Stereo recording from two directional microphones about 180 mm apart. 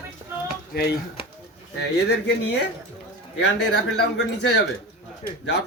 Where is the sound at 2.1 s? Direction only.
75° left (ahead or behind).